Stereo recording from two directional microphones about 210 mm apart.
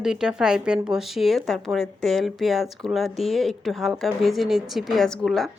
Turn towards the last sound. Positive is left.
turn(degrees=0)  # may be behind; listen again after turning